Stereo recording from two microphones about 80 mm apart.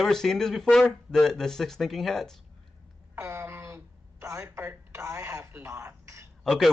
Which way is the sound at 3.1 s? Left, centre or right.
Right.